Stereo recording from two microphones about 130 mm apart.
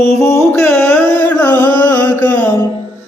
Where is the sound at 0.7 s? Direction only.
15° left (ahead or behind).